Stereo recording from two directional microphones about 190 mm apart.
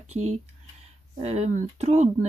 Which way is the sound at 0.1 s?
35° right (ahead or behind).